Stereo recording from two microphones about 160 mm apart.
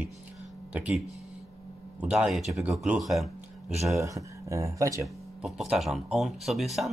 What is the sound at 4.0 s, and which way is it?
Speech, 20° right (ahead or behind).